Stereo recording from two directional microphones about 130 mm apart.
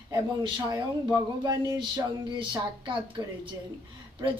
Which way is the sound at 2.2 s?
40° right (ahead or behind).